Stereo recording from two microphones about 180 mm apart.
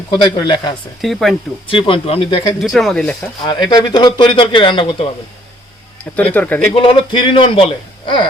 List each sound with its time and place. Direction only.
0.3 s speech: 25° left (ahead or behind)
1.0 s speech: centre (ahead or behind)
1.7 s speech: 30° left (ahead or behind)
2.6 s speech: centre (ahead or behind)
3.2 s speech: 25° left (ahead or behind)
6.1 s speech: 10° left (ahead or behind)
6.7 s speech: 30° left (ahead or behind)